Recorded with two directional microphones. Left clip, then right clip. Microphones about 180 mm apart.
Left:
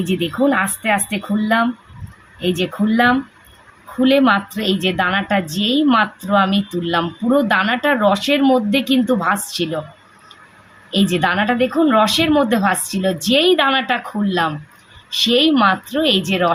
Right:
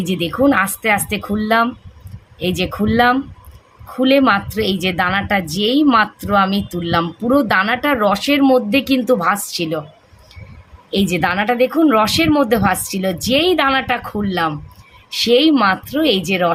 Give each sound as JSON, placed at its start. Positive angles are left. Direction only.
{"t": 0.1, "sound": "a woman's voice", "side_deg": -25}
{"t": 10.9, "sound": "a woman's voice", "side_deg": -25}